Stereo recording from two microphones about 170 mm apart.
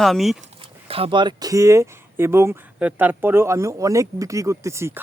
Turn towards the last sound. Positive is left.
turn(degrees=-15)  # may be behind; listen again after turning